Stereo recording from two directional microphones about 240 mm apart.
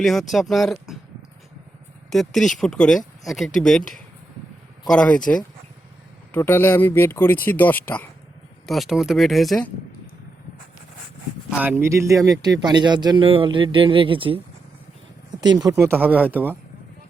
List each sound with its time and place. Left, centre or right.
0.0 s speech: centre
2.0 s speech: centre
4.9 s speech: centre
11.5 s speech: centre